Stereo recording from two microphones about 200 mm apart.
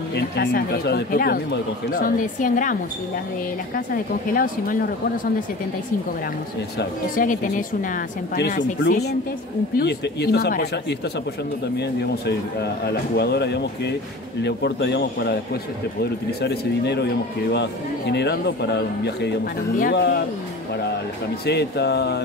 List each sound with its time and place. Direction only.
0.1 s speech: 50° left (ahead or behind)
6.8 s speech: 40° left (ahead or behind)
21.5 s speech: 55° left (ahead or behind)